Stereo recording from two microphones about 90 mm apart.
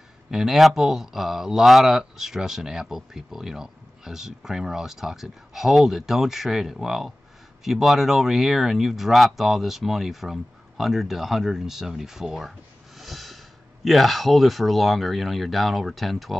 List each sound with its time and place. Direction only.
0.3 s speech: 5° right (ahead or behind)